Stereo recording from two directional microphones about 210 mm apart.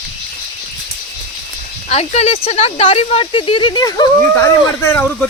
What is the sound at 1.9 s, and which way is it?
Speech, 30° left (ahead or behind).